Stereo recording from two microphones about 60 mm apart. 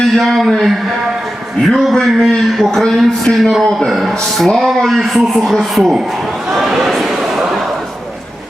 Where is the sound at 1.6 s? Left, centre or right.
Centre.